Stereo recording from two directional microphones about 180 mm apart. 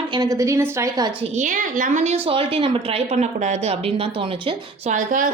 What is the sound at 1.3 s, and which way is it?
A woman's voice, 45° right (ahead or behind).